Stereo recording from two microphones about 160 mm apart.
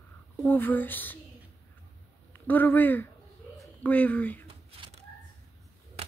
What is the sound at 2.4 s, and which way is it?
Speech, 10° left (ahead or behind).